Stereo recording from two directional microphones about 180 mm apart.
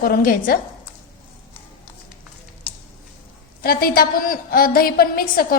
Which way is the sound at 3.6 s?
55° left (ahead or behind).